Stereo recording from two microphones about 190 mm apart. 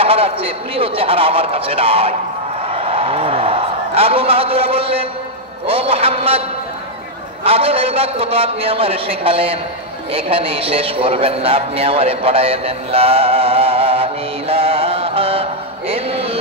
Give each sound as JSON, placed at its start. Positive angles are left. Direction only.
{"t": 0.0, "sound": "a man's voice", "side_deg": -30}
{"t": 2.7, "sound": "a sound", "side_deg": -30}
{"t": 5.7, "sound": "a man's voice", "side_deg": -30}
{"t": 7.4, "sound": "a man's voice", "side_deg": -30}
{"t": 14.5, "sound": "mantra", "side_deg": -30}
{"t": 15.9, "sound": "a sound", "side_deg": -30}